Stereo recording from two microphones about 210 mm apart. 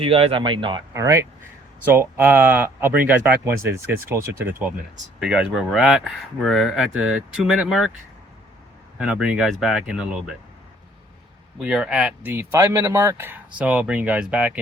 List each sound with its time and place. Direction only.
0.0 s speech: 25° right (ahead or behind); by 7.9 s centre (ahead or behind)
9.0 s speech: 5° right (ahead or behind)
11.5 s speech: 5° right (ahead or behind)